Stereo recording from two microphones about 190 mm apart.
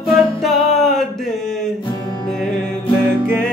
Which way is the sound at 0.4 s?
Centre (ahead or behind).